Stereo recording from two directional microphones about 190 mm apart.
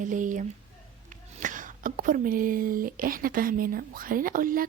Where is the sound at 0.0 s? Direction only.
40° right (ahead or behind).